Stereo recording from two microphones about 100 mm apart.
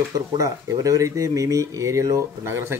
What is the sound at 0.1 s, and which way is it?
Speech, 35° right (ahead or behind).